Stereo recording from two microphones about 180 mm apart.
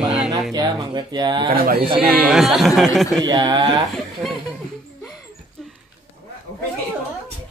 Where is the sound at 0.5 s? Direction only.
25° right (ahead or behind).